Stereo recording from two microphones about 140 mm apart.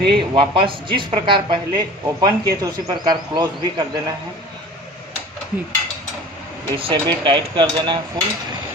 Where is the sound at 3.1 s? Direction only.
30° right (ahead or behind).